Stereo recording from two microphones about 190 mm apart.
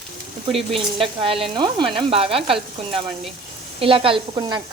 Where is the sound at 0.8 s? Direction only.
30° right (ahead or behind).